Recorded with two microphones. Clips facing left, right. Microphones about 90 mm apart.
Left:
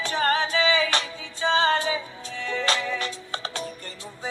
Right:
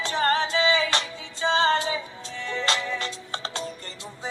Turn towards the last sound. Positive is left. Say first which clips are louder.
# even
turn(degrees=-25)  # may be behind; listen again after turning